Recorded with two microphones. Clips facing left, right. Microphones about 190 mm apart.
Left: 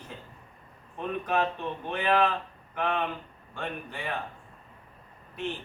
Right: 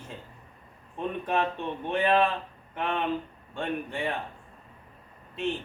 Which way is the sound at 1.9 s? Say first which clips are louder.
Right 2 dB; 25° right (ahead or behind).